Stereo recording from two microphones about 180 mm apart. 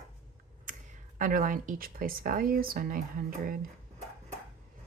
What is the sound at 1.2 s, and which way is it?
Speech, 50° right (ahead or behind).